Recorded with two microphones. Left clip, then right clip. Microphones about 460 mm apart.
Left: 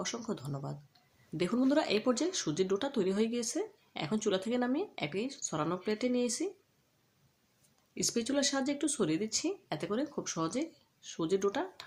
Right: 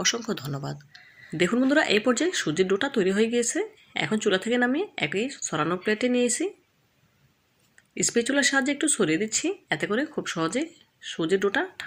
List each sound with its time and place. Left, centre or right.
0.0 s speech: right
7.9 s speech: right